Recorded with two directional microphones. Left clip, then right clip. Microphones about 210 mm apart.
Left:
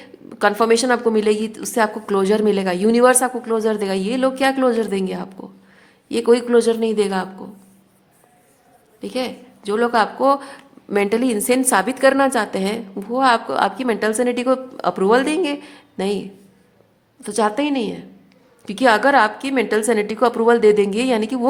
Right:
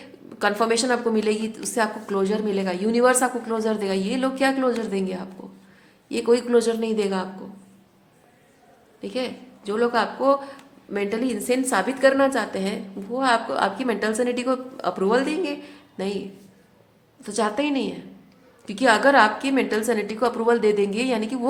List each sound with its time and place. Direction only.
0.0 s a woman's voice: 30° left (ahead or behind)
9.0 s a woman's voice: 35° left (ahead or behind)
17.2 s a woman's voice: 30° left (ahead or behind)